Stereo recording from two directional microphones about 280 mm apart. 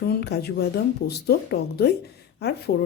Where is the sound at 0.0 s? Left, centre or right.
Left.